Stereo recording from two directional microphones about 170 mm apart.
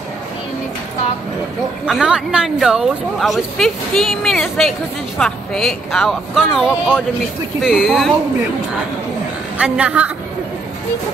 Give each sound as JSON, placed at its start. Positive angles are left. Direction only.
{"t": 1.9, "sound": "speech", "side_deg": -5}
{"t": 9.6, "sound": "a woman's voice", "side_deg": -5}